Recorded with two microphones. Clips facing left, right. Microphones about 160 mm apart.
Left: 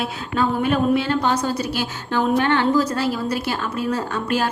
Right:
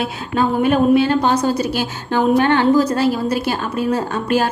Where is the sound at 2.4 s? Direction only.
35° right (ahead or behind).